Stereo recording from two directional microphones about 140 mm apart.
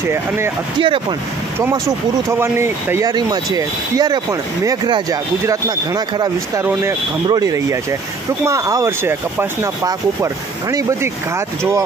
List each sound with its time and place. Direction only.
0.0 s speech: 15° right (ahead or behind)
0.7 s speech: 40° right (ahead or behind)
2.2 s speech: 20° right (ahead or behind)
3.1 s speech: 30° right (ahead or behind)
6.6 s speech: 15° right (ahead or behind)